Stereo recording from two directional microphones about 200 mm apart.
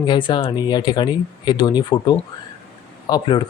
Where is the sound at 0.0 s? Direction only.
25° left (ahead or behind).